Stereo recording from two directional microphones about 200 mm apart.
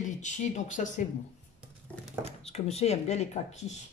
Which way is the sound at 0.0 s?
35° left (ahead or behind).